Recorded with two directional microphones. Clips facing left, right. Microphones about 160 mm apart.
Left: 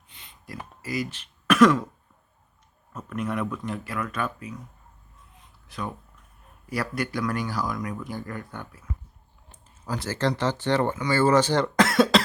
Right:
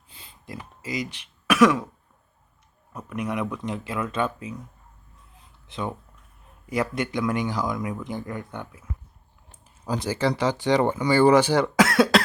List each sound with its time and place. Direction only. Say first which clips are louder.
0.1 s a sound: right 2 dB; 30° right (ahead or behind)
0.8 s speech: left 1 dB; 20° right (ahead or behind)
2.9 s speech: even; 10° right (ahead or behind)
5.6 s speech: right 3 dB; 25° right (ahead or behind)
9.8 s speech: right 2 dB; 15° right (ahead or behind)